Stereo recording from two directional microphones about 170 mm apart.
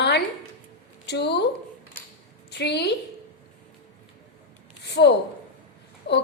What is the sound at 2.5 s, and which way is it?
Speech, 85° left.